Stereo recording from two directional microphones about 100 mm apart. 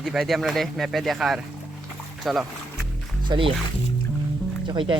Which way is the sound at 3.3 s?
60° right (ahead or behind).